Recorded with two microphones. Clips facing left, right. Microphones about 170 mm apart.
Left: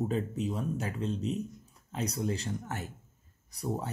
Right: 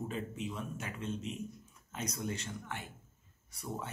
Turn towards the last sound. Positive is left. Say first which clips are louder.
# left 7 dB
turn(degrees=35)  # may be behind; listen again after turning